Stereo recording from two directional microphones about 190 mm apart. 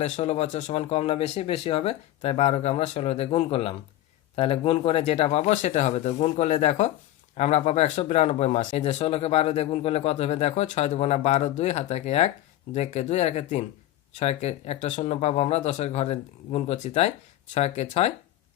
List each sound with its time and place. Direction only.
0.0 s speech: 35° left (ahead or behind)